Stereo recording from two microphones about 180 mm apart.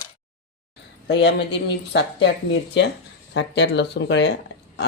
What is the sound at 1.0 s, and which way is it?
Speech, 70° left (ahead or behind).